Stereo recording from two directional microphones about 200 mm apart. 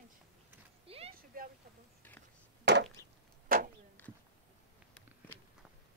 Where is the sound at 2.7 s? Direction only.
60° right (ahead or behind).